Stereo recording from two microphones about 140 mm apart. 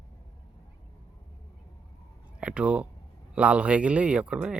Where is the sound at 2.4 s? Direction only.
5° right (ahead or behind).